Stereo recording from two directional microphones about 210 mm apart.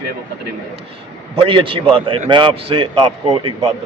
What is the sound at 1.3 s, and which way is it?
A man's voice, 25° right (ahead or behind).